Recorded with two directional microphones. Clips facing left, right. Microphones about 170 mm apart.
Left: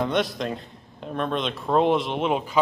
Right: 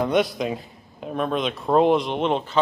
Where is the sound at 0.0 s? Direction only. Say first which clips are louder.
Right 3 dB; centre (ahead or behind).